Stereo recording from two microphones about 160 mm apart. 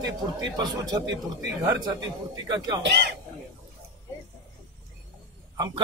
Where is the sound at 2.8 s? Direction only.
90° right.